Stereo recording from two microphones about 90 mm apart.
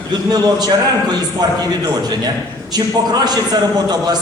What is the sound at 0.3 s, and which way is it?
A man's voice, 50° right (ahead or behind).